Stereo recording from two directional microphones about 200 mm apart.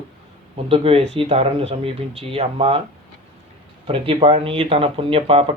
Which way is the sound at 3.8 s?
25° right (ahead or behind).